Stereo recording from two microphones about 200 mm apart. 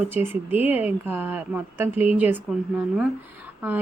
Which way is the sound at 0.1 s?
10° right (ahead or behind).